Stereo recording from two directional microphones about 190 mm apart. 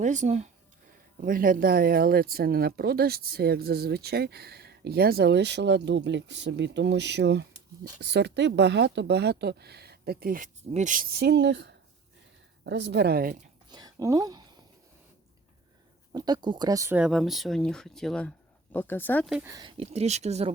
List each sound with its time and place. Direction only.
0.0 s speech: 40° right (ahead or behind)
13.7 s speech: 20° right (ahead or behind)
16.1 s speech: 20° right (ahead or behind); by 19.2 s 10° left (ahead or behind)
19.2 s speech: 5° right (ahead or behind)
19.5 s speech: 25° right (ahead or behind)